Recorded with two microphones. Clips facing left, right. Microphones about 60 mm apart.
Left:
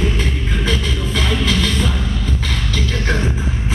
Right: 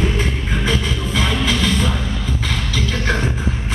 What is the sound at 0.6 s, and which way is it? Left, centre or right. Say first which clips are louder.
Music: right 1 dB; centre.